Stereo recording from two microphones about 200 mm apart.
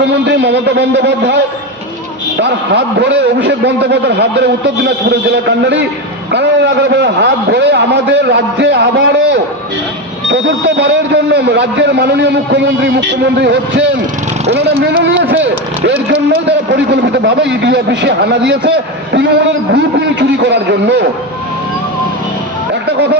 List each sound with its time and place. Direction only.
0.1 s a man's voice: 60° right (ahead or behind)
2.4 s a man's voice: 60° right (ahead or behind)
19.7 s a man's voice: 60° right (ahead or behind)